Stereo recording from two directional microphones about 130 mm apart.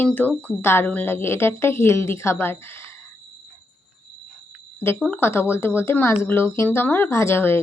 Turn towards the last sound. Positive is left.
turn(degrees=20)  # may be behind; listen again after turning